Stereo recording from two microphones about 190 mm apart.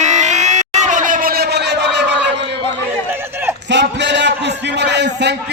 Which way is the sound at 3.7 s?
65° right (ahead or behind).